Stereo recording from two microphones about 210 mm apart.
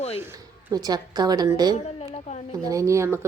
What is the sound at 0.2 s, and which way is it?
A woman's voice, 15° right (ahead or behind).